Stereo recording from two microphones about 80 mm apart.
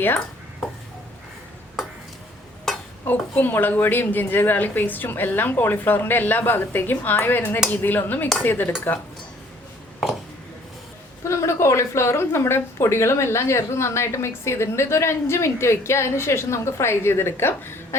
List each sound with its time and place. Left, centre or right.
3.0 s a woman's voice: left
11.2 s a woman's voice: left